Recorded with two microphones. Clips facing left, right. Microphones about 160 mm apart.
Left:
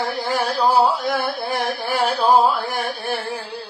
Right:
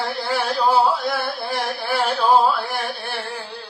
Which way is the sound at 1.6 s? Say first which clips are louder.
Left 2 dB; 45° left (ahead or behind).